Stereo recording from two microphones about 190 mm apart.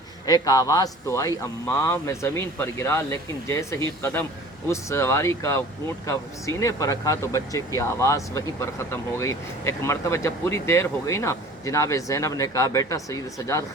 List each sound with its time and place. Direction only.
0.3 s speech: 20° left (ahead or behind)